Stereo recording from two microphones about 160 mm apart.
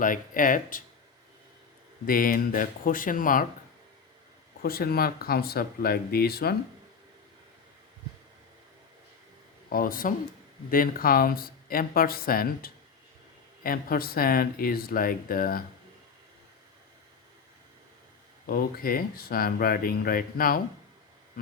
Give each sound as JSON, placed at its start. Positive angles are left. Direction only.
{"t": 0.0, "sound": "speech", "side_deg": 55}
{"t": 2.0, "sound": "speech", "side_deg": 65}
{"t": 4.6, "sound": "speech", "side_deg": 70}
{"t": 9.6, "sound": "speech", "side_deg": 65}
{"t": 18.4, "sound": "speech", "side_deg": 65}